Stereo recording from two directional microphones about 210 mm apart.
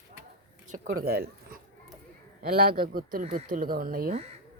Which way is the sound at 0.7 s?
45° right (ahead or behind).